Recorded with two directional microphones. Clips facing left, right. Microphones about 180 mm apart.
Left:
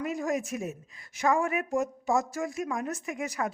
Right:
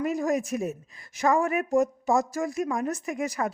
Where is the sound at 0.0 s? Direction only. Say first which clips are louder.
Right 4 dB; 40° right (ahead or behind).